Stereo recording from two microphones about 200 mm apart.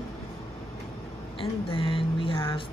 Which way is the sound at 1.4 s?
25° left (ahead or behind).